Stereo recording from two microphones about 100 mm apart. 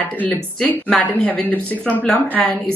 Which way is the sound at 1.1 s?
15° left (ahead or behind).